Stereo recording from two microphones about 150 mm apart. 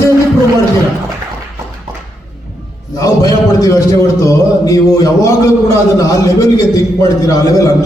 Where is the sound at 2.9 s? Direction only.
20° left (ahead or behind).